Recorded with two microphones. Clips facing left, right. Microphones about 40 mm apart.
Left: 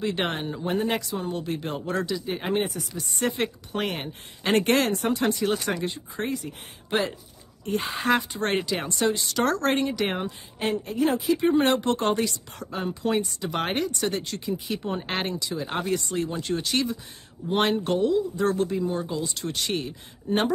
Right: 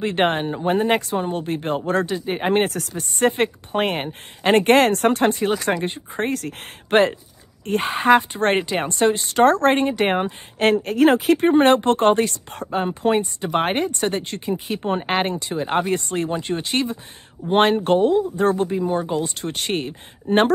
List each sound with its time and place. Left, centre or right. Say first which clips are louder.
0.0 s speech: right 7 dB; right
2.5 s speech: right 6 dB; right
6.3 s speech: right 5 dB; right
10.6 s speech: right 9 dB; right